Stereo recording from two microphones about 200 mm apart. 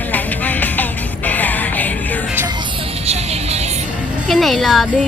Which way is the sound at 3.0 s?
30° right (ahead or behind).